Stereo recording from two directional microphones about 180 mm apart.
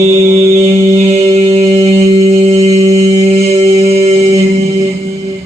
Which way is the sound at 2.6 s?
20° right (ahead or behind).